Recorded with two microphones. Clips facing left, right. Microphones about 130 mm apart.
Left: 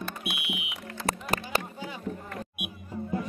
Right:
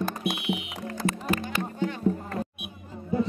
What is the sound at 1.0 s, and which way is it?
Music, 35° left (ahead or behind).